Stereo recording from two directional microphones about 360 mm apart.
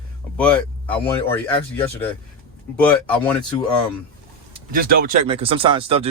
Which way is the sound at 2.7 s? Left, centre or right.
Centre.